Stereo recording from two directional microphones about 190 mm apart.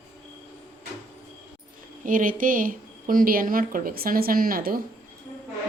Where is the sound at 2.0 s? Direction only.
45° right (ahead or behind).